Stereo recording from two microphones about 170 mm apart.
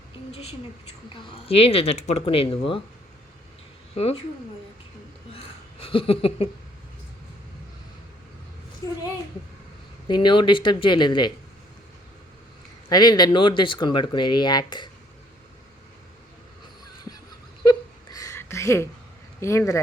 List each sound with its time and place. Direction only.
0.3 s speech: 35° left (ahead or behind)
3.9 s speech: 40° left (ahead or behind)
5.8 s speech: 30° left (ahead or behind)
8.8 s speech: 20° left (ahead or behind)
10.1 s speech: 30° left (ahead or behind)
12.9 s speech: 25° left (ahead or behind)
17.6 s a sound: 25° left (ahead or behind)
19.4 s speech: 15° left (ahead or behind)